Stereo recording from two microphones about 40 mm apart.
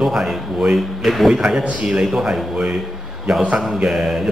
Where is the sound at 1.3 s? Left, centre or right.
Centre.